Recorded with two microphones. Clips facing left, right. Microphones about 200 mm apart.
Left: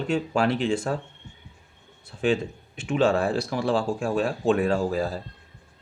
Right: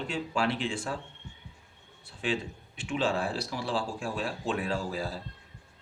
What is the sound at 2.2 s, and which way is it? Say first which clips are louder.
Speech: left 8 dB; 45° left (ahead or behind).